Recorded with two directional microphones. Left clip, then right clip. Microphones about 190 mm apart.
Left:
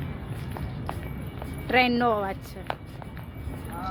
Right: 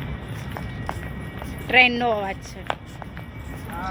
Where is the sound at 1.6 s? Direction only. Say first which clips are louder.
Right 5 dB; 20° left (ahead or behind).